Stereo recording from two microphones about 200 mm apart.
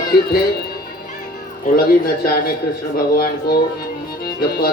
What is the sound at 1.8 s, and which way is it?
Speech, 50° left (ahead or behind).